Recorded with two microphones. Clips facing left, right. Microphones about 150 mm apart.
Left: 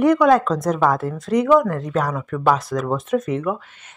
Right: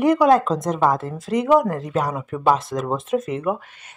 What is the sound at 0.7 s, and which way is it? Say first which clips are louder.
Speech: right 1 dB; 25° right (ahead or behind).